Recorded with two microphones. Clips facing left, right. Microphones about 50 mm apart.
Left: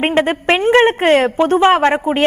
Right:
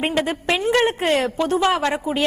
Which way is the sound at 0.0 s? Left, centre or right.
Left.